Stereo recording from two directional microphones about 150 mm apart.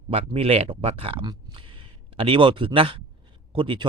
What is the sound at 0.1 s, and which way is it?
Speech, 40° right (ahead or behind).